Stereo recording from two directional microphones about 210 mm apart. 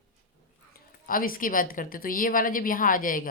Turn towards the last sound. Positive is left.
turn(degrees=40)  # may be behind; listen again after turning